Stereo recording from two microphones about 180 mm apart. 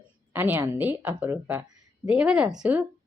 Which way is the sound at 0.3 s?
10° right (ahead or behind).